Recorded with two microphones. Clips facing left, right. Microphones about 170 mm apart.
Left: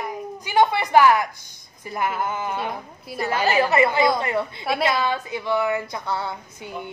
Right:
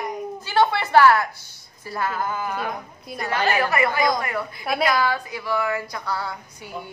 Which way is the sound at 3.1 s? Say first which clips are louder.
Left 3 dB; 5° left (ahead or behind).